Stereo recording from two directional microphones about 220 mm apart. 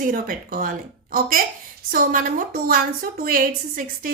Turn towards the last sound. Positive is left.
turn(degrees=-40)  # may be behind; listen again after turning